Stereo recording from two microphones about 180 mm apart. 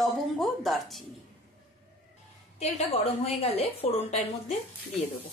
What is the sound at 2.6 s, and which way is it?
A woman's voice, 35° left (ahead or behind).